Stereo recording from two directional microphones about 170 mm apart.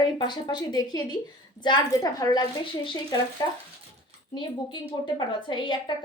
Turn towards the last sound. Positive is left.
turn(degrees=25)  # may be behind; listen again after turning